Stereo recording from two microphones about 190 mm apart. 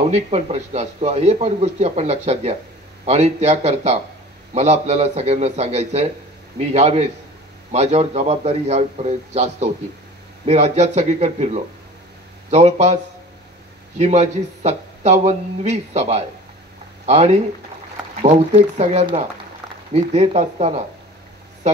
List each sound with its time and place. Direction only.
0.1 s speech: 35° right (ahead or behind)